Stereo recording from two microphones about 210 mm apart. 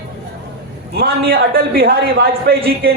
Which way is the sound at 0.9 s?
45° right (ahead or behind).